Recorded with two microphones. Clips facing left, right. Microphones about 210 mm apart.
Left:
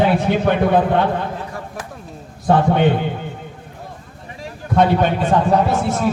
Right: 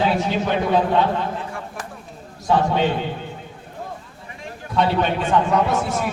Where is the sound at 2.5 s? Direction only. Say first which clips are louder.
Left 4 dB; 55° left (ahead or behind).